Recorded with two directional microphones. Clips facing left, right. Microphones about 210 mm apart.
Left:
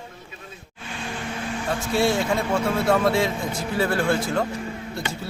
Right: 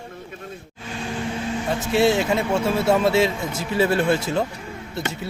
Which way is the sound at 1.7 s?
20° right (ahead or behind).